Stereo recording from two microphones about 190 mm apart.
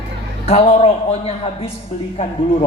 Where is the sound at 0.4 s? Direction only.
35° left (ahead or behind).